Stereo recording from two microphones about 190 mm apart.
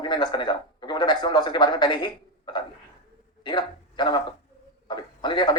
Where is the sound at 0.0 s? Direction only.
25° left (ahead or behind).